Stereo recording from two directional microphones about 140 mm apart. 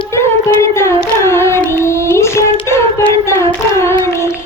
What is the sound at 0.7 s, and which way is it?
Carnatic music, 20° left (ahead or behind).